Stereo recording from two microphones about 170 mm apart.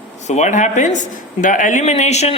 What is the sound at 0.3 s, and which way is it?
Speech, 45° left (ahead or behind).